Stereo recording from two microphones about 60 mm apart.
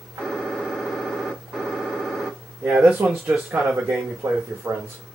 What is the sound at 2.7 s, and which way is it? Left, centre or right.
Speech, centre.